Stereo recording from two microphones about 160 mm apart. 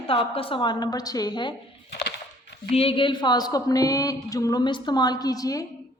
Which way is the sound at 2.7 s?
35° left (ahead or behind).